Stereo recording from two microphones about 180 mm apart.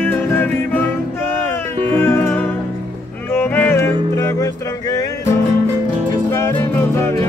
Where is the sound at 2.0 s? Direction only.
10° left (ahead or behind).